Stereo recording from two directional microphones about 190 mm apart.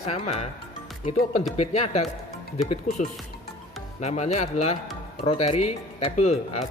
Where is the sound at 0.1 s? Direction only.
35° left (ahead or behind).